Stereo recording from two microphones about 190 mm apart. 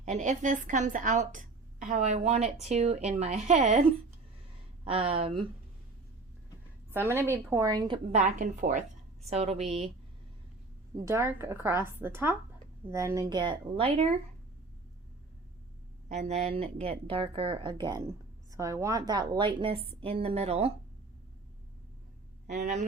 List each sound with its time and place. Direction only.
0.0 s a woman's voice: 40° right (ahead or behind)
4.9 s a woman's voice: 30° right (ahead or behind)
6.9 s a woman's voice: 10° right (ahead or behind)
8.2 s a woman's voice: 40° right (ahead or behind)
10.9 s a woman's voice: 15° right (ahead or behind); by 14.1 s 30° right (ahead or behind)
16.0 s a woman's voice: 35° right (ahead or behind)
22.4 s a woman's voice: 40° right (ahead or behind)